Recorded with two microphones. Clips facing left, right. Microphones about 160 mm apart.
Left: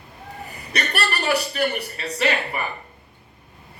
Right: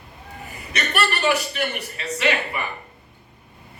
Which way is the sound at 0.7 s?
35° left (ahead or behind).